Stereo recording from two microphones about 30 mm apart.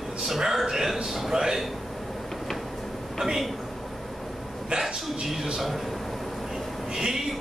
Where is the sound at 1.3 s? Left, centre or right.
Centre.